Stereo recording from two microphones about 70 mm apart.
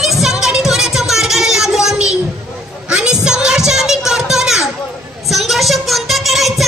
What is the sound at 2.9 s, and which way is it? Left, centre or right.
Music, centre.